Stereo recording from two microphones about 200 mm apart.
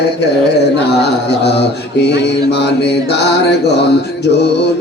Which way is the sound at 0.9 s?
55° left (ahead or behind).